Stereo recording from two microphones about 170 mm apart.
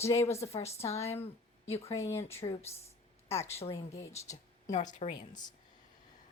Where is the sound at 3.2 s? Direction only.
35° left (ahead or behind).